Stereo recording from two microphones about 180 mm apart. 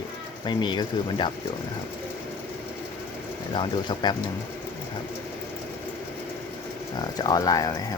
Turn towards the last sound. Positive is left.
turn(degrees=20)  # may be behind; listen again after turning